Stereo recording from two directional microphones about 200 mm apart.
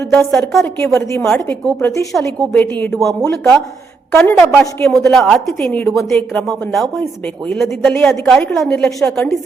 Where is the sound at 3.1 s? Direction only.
15° right (ahead or behind).